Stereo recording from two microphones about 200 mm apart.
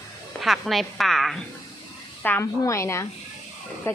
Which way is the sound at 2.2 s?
10° left (ahead or behind).